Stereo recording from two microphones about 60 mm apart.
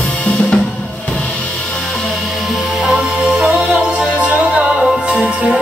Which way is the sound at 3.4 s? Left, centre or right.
Centre.